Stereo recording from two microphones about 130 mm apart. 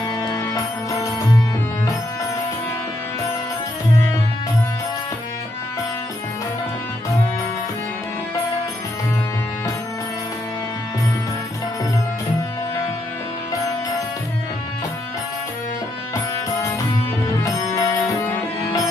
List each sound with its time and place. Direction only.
0.2 s music: 25° left (ahead or behind)
17.4 s music: 25° left (ahead or behind)